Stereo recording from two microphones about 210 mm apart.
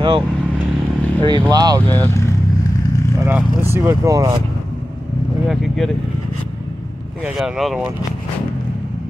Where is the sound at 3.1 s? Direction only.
10° right (ahead or behind).